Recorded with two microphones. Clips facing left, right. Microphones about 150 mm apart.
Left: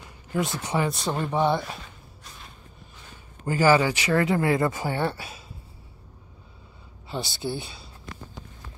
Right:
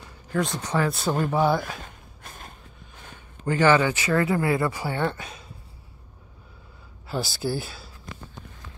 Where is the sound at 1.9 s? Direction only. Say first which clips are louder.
Right 2 dB; 50° right (ahead or behind).